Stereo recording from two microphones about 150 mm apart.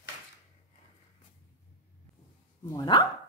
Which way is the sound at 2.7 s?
25° left (ahead or behind).